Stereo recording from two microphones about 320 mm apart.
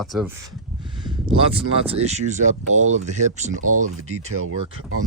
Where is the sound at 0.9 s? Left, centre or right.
Centre.